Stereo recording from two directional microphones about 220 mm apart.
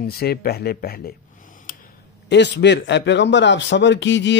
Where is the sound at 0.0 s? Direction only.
45° left (ahead or behind).